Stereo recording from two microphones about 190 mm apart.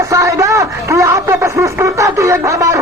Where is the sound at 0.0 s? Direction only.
15° right (ahead or behind).